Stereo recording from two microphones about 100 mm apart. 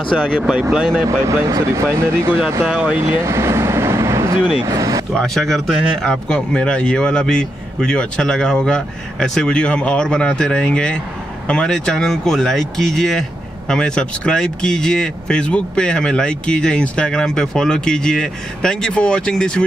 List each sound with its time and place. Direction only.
0.2 s speech: 5° right (ahead or behind)
1.0 s speech: 30° right (ahead or behind)
2.6 s speech: 10° right (ahead or behind)
3.1 s vehicle: 25° right (ahead or behind)
4.6 s speech: 35° right (ahead or behind)
5.1 s speech: centre (ahead or behind)